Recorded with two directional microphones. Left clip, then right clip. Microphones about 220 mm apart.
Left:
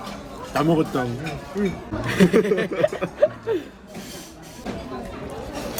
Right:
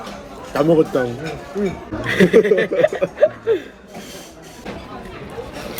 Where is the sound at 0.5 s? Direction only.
25° left (ahead or behind).